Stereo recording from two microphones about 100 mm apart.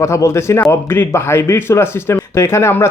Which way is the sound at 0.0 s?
30° left (ahead or behind).